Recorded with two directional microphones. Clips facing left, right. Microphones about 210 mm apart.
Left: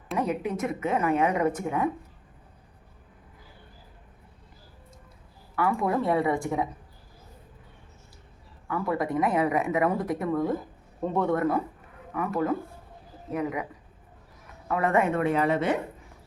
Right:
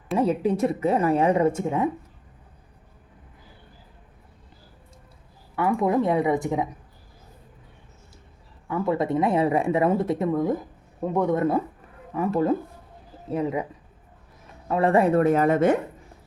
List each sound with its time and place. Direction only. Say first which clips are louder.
0.2 s speech: right 6 dB; 30° right (ahead or behind)
5.5 s speech: right 4 dB; 20° right (ahead or behind)
8.6 s speech: right 4 dB; 25° right (ahead or behind)
14.7 s speech: right 5 dB; 30° right (ahead or behind); by 15.8 s 50° right (ahead or behind)